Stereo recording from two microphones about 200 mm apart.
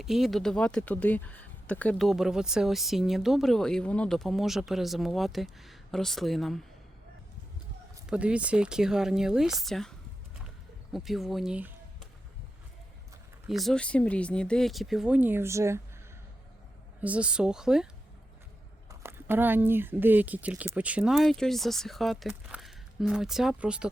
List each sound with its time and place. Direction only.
0.0 s speech: centre (ahead or behind)
8.0 s speech: 5° right (ahead or behind)
10.9 s speech: centre (ahead or behind)
13.5 s speech: centre (ahead or behind)
17.0 s speech: 5° right (ahead or behind)
18.9 s speech: 10° right (ahead or behind)